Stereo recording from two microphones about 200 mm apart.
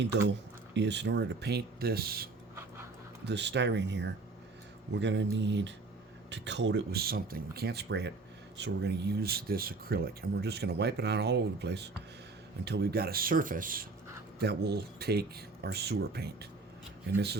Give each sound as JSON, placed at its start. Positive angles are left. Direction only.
{"t": 0.3, "sound": "speech", "side_deg": -60}
{"t": 3.2, "sound": "speech", "side_deg": -60}
{"t": 14.3, "sound": "speech", "side_deg": -55}